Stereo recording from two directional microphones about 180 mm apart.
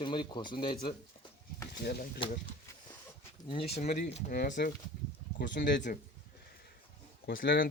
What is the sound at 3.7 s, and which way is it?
Speech, 40° left (ahead or behind).